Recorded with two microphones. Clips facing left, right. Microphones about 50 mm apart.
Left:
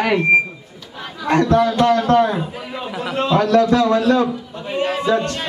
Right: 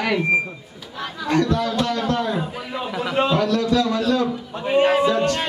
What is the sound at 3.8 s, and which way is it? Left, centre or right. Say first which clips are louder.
Speech: left 6 dB; centre.